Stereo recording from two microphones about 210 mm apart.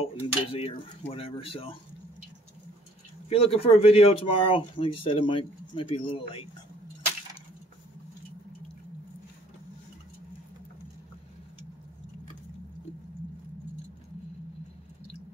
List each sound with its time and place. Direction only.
0.0 s speech: 25° left (ahead or behind)
3.3 s speech: 25° left (ahead or behind)